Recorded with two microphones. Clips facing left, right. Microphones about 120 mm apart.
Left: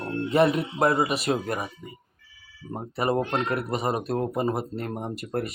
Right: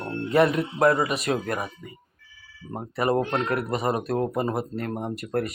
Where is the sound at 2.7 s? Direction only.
25° left (ahead or behind).